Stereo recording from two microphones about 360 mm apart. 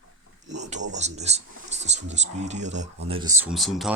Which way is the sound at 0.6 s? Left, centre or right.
Centre.